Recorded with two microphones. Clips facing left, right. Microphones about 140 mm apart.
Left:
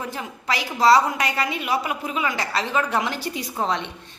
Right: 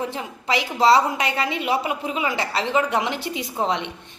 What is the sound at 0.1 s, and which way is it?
A woman's voice, 25° right (ahead or behind).